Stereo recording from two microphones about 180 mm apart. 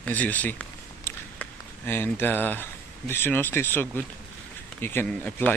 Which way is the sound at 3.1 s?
10° left (ahead or behind).